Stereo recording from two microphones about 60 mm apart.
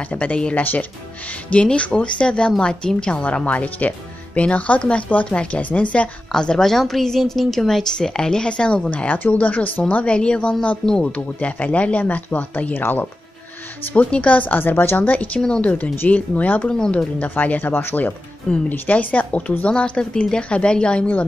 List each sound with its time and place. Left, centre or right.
0.1 s a woman's voice: left
6.3 s a woman's voice: centre